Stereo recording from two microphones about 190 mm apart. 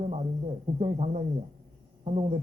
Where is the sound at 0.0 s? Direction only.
35° right (ahead or behind).